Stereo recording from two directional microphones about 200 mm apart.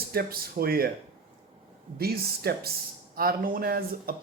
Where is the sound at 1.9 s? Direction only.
50° right (ahead or behind).